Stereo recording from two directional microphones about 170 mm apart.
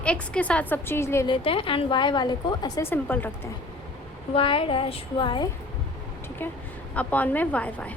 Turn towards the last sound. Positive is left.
turn(degrees=10)  # may be behind; listen again after turning